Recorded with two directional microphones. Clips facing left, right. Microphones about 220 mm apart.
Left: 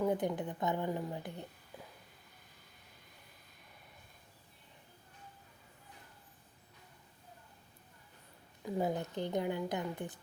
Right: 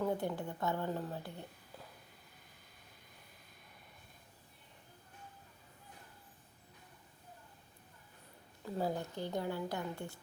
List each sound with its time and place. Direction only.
0.0 s speech: 15° left (ahead or behind)
8.6 s a woman's voice: 15° left (ahead or behind)